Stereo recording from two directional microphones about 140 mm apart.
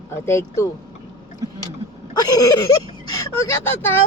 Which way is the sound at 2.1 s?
30° left (ahead or behind).